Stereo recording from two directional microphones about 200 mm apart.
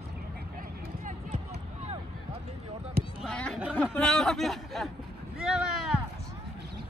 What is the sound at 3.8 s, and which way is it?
Speech, 5° left (ahead or behind).